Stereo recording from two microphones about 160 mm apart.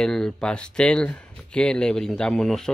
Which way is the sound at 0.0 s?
5° left (ahead or behind).